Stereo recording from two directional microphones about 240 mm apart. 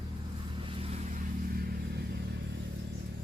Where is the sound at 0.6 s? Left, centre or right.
Right.